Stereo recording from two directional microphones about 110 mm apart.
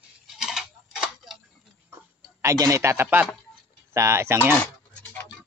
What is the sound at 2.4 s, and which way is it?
Speech, 30° right (ahead or behind).